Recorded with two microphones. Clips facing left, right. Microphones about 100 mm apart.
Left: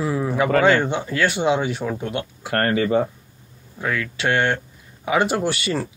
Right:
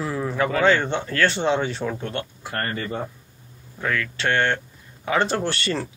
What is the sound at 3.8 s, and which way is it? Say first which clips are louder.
Speech: left 1 dB; 10° left (ahead or behind).